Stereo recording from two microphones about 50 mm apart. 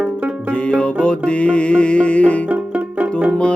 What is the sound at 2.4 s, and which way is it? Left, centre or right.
Banjo, right.